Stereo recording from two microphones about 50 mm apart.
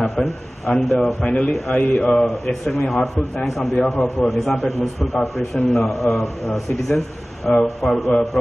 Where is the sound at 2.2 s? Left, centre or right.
Centre.